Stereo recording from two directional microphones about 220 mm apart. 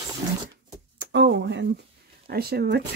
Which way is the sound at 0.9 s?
55° right (ahead or behind).